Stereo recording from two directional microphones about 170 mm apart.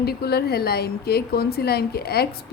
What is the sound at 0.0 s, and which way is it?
A woman's voice, 70° left (ahead or behind).